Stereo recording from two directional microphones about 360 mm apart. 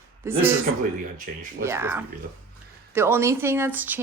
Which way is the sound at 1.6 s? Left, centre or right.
Centre.